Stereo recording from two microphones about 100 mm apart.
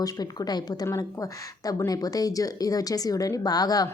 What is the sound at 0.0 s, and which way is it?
A woman's voice, 40° left (ahead or behind).